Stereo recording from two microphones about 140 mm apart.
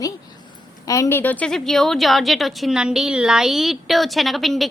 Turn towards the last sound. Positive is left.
turn(degrees=0)  # may be behind; listen again after turning